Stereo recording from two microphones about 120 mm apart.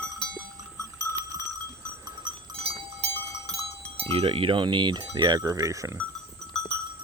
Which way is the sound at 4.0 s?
50° right (ahead or behind).